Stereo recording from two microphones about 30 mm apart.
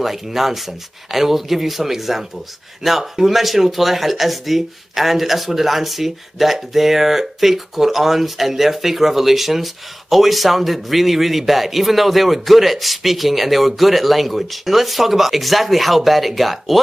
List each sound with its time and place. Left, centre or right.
0.0 s speech: centre